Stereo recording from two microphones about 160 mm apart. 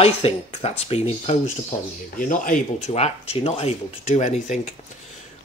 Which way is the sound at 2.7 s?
45° left (ahead or behind).